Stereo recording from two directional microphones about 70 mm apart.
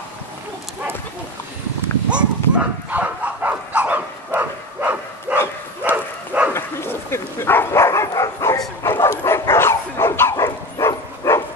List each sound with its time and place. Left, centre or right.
2.0 s dog: centre
6.5 s dog: left
8.4 s bow-wow: left
8.8 s dog: left
10.8 s a sound: left
11.3 s dog: left